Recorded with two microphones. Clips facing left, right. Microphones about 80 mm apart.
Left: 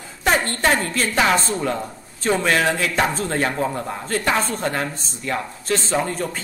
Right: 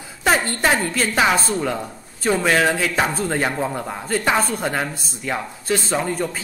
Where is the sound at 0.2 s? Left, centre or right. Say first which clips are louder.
Right 1 dB; centre.